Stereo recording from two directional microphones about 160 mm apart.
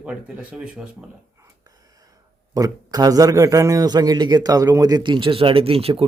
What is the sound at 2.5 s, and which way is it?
A man's voice, 25° right (ahead or behind).